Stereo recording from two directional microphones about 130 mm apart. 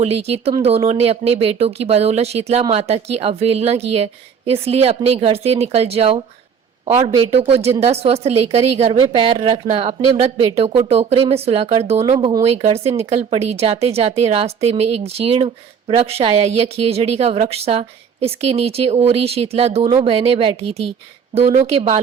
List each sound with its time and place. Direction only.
0.0 s speech: 50° right (ahead or behind)
10.5 s speech: 45° right (ahead or behind)